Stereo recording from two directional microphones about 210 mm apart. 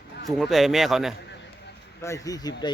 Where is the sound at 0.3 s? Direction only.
Centre (ahead or behind).